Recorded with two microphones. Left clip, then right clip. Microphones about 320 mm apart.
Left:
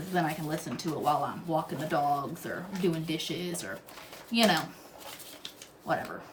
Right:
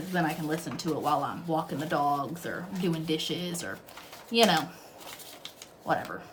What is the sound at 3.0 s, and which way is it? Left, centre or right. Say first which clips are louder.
Speech: right 3 dB; centre.